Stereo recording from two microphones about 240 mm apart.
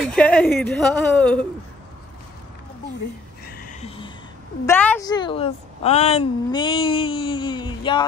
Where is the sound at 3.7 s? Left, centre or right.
Left.